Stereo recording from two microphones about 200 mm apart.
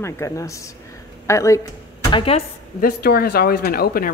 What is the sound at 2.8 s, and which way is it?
Speech, 50° left (ahead or behind).